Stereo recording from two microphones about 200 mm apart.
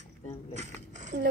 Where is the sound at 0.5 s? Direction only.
35° right (ahead or behind).